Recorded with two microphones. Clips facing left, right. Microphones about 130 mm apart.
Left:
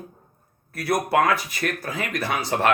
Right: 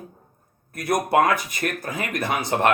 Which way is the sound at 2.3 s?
20° right (ahead or behind).